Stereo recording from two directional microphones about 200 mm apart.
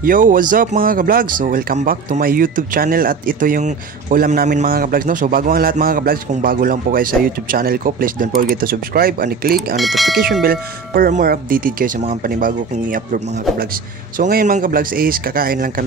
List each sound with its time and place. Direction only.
0.0 s speech: 45° right (ahead or behind)
9.8 s speech: centre (ahead or behind)
10.4 s speech: 50° right (ahead or behind)